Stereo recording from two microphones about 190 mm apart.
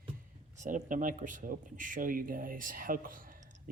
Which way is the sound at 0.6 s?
40° right (ahead or behind).